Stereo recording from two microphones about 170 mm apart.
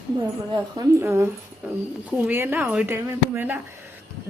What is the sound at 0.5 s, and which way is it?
Speech, 20° right (ahead or behind).